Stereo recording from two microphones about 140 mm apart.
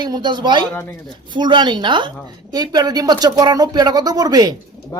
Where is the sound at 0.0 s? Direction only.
30° right (ahead or behind).